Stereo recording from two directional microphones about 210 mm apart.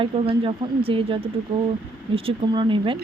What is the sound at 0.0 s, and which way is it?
Speech, 25° right (ahead or behind).